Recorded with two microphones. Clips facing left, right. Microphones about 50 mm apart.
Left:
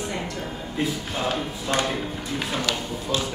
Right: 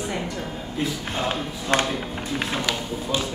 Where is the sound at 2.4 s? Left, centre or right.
Centre.